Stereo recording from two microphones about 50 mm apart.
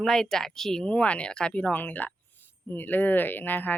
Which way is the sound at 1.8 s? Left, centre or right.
Left.